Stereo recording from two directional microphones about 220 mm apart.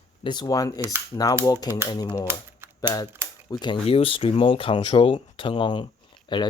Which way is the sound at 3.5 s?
20° left (ahead or behind).